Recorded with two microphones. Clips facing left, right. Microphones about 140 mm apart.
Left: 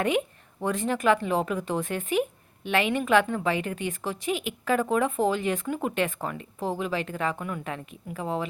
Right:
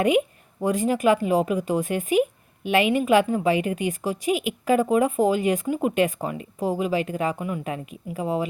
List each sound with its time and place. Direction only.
0.6 s a woman's voice: 10° right (ahead or behind)